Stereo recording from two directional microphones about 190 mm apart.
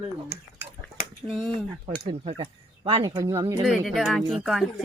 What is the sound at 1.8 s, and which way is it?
Speech, 30° right (ahead or behind).